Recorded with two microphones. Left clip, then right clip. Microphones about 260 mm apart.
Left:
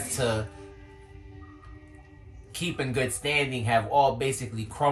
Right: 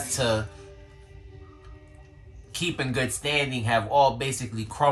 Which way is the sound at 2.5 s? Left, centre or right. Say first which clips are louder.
Right 2 dB; centre.